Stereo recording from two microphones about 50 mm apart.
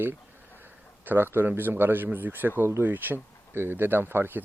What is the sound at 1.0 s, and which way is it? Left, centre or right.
Speech, right.